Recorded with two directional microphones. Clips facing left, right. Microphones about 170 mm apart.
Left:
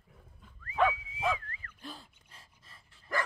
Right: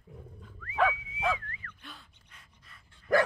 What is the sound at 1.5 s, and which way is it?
Dog, 35° left (ahead or behind).